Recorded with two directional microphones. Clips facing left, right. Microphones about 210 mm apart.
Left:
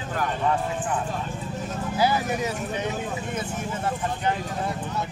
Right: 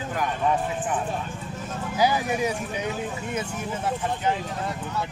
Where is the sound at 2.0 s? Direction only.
15° right (ahead or behind).